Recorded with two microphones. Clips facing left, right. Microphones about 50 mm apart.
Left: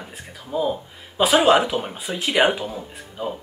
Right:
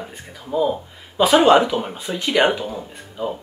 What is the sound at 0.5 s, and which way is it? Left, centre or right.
Speech, centre.